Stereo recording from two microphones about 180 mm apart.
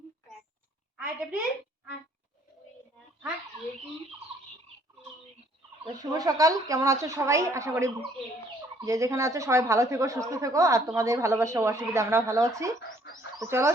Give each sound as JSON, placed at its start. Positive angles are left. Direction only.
{"t": 5.8, "sound": "speech", "side_deg": -20}